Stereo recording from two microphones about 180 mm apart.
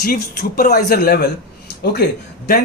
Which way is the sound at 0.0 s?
55° left (ahead or behind).